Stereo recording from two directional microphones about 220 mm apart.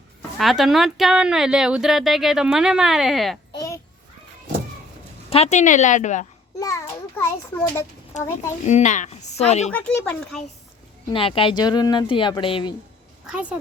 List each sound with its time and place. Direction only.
0.2 s speech: centre (ahead or behind)
3.5 s a sound: 15° left (ahead or behind)
5.3 s a woman's voice: 30° left (ahead or behind)
6.6 s a child's voice: 15° left (ahead or behind)
8.1 s a woman's voice: 35° left (ahead or behind)
9.6 s speech: 5° left (ahead or behind)
11.1 s speech: 25° left (ahead or behind)
13.2 s speech: 5° right (ahead or behind)